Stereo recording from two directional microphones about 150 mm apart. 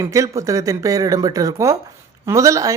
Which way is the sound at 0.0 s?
20° right (ahead or behind).